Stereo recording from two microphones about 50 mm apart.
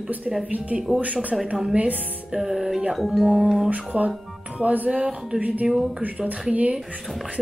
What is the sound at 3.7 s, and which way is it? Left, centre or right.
Speech, right.